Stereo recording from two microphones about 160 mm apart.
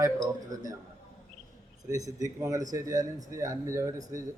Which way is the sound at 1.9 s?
20° right (ahead or behind).